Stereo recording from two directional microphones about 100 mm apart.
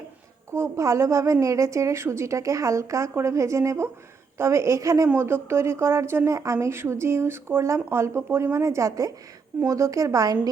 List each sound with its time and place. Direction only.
0.5 s a woman's voice: 30° right (ahead or behind)